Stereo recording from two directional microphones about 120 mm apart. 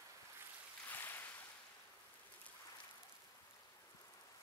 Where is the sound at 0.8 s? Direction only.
15° left (ahead or behind).